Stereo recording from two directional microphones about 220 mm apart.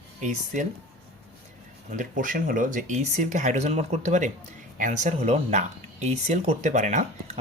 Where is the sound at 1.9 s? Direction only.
35° right (ahead or behind).